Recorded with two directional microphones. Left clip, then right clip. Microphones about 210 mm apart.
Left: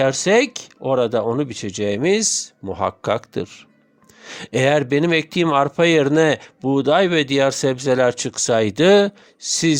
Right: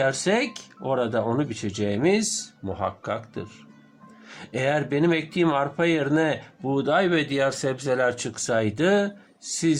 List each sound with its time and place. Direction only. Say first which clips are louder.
0.0 s speech: left 7 dB; 45° left (ahead or behind)